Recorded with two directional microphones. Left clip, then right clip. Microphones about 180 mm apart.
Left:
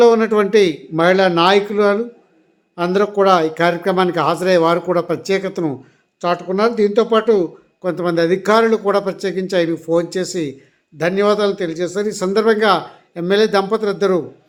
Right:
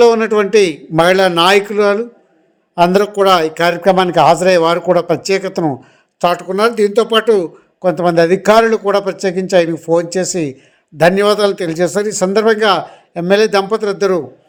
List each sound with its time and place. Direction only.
0.0 s a man's voice: 15° right (ahead or behind)
2.7 s a man's voice: 30° right (ahead or behind)
7.8 s a man's voice: 20° right (ahead or behind)
10.9 s a man's voice: 30° right (ahead or behind)